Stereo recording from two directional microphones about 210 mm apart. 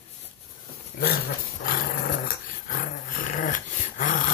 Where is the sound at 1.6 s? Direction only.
45° left (ahead or behind).